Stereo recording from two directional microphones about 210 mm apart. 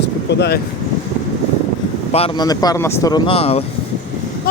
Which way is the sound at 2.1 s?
30° left (ahead or behind).